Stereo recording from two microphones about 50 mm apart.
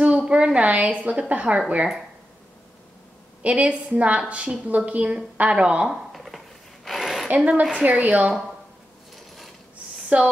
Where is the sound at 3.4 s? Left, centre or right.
Right.